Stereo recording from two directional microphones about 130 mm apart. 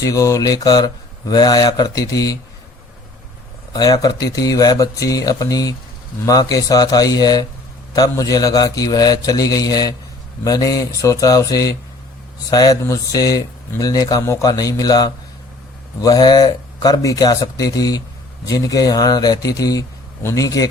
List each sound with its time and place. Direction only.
0.0 s speech: 25° left (ahead or behind)
3.7 s speech: 30° left (ahead or behind)